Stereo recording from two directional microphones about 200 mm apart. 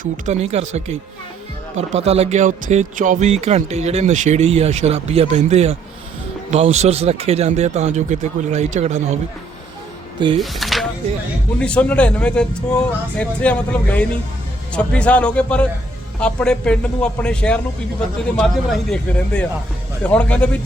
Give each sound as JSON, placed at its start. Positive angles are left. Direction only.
{"t": 0.0, "sound": "speech", "side_deg": -35}
{"t": 1.7, "sound": "speech", "side_deg": -35}
{"t": 10.3, "sound": "speech", "side_deg": 0}